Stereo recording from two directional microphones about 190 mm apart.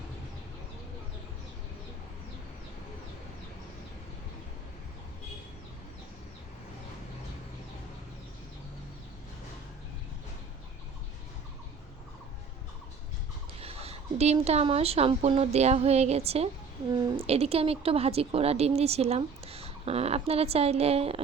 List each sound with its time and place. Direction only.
13.6 s speech: 30° right (ahead or behind)